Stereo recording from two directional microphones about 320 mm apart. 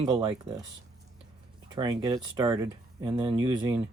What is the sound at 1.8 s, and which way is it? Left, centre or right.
Speech, centre.